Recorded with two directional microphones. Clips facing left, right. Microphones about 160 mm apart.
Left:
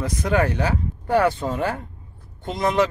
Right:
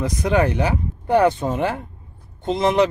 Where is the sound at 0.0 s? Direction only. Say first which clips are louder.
Right 2 dB; 20° right (ahead or behind).